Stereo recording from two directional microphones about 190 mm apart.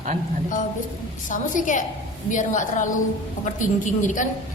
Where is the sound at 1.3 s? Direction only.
40° left (ahead or behind).